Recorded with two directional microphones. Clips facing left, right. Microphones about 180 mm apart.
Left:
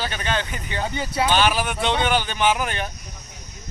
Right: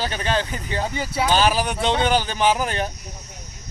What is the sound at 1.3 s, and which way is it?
Speech, 35° right (ahead or behind).